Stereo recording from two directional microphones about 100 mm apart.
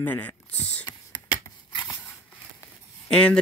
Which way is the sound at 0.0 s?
15° left (ahead or behind).